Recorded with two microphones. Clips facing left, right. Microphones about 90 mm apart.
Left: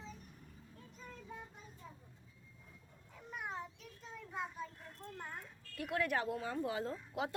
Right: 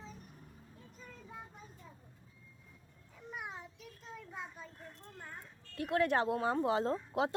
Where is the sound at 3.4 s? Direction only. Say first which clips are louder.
Left 3 dB; 5° right (ahead or behind).